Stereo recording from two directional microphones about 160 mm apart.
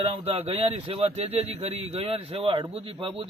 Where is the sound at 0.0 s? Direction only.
35° right (ahead or behind).